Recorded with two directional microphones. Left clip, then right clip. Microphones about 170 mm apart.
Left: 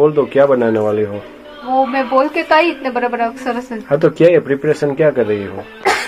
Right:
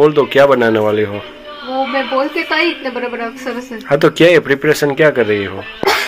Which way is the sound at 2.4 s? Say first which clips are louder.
Left 3 dB; 30° left (ahead or behind).